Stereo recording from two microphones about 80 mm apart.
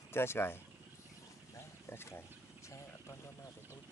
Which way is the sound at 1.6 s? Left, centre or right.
Left.